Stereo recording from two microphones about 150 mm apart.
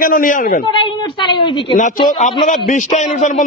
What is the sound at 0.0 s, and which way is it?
Speech, 65° left (ahead or behind).